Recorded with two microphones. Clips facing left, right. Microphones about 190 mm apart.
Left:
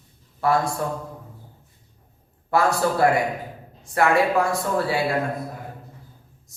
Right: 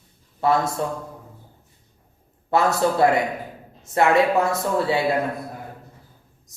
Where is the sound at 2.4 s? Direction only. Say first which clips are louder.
Right 1 dB; 20° right (ahead or behind).